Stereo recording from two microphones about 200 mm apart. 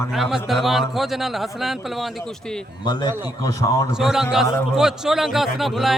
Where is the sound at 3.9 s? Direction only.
Centre (ahead or behind).